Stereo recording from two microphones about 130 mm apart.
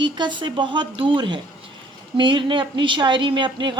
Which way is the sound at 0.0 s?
35° right (ahead or behind).